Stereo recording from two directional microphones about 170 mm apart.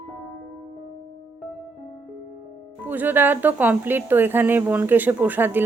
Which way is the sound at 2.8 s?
10° right (ahead or behind).